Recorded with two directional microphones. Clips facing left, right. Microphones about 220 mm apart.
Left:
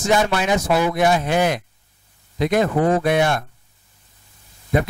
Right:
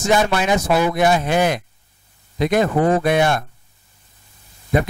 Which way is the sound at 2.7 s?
30° right (ahead or behind).